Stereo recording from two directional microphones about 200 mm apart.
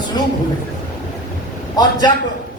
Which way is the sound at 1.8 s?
20° left (ahead or behind).